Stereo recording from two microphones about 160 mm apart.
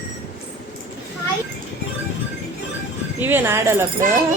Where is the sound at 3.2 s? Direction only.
15° right (ahead or behind).